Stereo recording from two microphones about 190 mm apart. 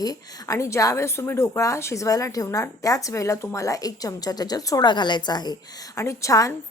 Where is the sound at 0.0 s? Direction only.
20° left (ahead or behind).